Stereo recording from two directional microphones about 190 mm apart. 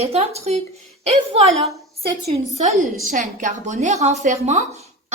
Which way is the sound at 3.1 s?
40° right (ahead or behind).